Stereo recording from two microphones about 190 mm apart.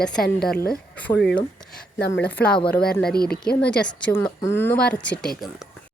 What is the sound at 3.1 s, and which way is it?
Speech, 55° left (ahead or behind).